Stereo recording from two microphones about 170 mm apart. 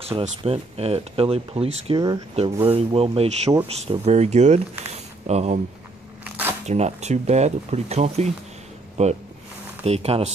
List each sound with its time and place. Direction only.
0.4 s speech: 35° right (ahead or behind)
6.2 s a sound: 10° right (ahead or behind)
6.6 s speech: 40° right (ahead or behind)